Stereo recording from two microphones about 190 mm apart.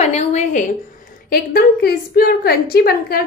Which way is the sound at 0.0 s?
35° left (ahead or behind).